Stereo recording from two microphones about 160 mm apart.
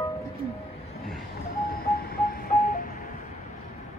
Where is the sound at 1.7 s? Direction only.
70° left (ahead or behind); by 3.1 s 55° left (ahead or behind).